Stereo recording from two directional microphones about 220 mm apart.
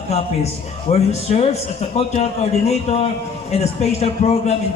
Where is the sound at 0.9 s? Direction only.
30° left (ahead or behind).